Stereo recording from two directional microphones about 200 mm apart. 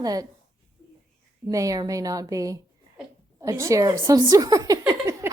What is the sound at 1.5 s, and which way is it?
Speech, 15° right (ahead or behind).